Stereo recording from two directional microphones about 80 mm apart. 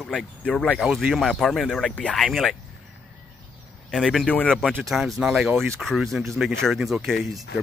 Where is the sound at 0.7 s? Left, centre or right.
Centre.